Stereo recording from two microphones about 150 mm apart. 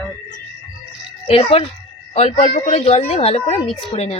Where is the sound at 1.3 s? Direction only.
40° left (ahead or behind).